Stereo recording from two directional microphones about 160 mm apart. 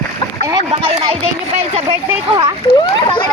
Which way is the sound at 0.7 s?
40° right (ahead or behind).